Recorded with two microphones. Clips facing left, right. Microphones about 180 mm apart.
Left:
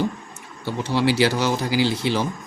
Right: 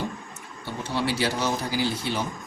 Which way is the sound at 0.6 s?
90° left.